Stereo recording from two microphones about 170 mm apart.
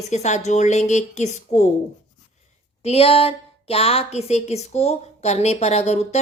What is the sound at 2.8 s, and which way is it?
A woman's voice, 35° left (ahead or behind).